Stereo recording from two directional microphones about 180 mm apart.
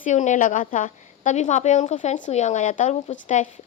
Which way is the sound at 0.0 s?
40° left (ahead or behind).